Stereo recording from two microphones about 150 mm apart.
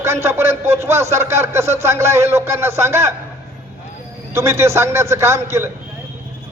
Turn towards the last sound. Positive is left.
turn(degrees=-20)  # may be behind; listen again after turning